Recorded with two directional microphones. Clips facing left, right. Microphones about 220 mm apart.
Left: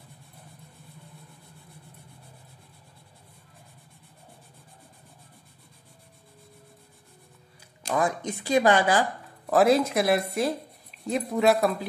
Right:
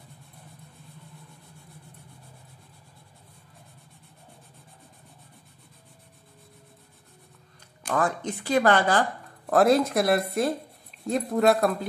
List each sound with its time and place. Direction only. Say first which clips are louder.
7.9 s speech: even; 10° left (ahead or behind)
9.5 s speech: even; centre (ahead or behind)